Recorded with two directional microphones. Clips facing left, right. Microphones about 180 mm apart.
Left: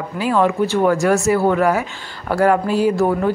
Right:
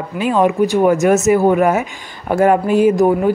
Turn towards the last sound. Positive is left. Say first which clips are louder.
# right 4 dB
turn(degrees=-15)  # may be behind; listen again after turning